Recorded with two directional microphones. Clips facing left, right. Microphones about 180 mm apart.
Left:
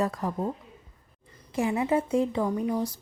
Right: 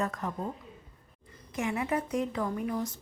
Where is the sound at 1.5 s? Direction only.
25° left (ahead or behind).